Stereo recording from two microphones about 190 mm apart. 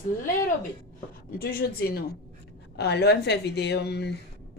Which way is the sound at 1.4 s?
50° left (ahead or behind).